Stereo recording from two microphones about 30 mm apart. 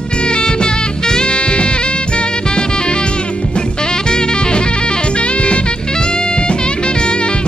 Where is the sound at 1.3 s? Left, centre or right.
Left.